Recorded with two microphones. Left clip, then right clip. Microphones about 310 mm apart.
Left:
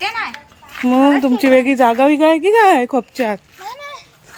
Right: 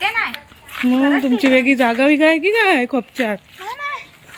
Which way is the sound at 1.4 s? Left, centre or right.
Centre.